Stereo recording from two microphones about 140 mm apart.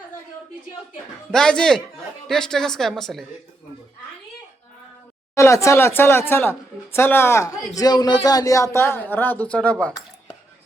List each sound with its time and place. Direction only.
1.3 s a woman's voice: 5° left (ahead or behind)
5.3 s a man's voice: 20° left (ahead or behind)